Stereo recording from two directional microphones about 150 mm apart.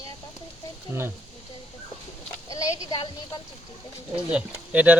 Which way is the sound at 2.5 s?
20° left (ahead or behind).